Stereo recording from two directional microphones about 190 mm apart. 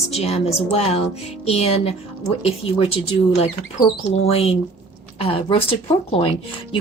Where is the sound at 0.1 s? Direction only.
35° left (ahead or behind).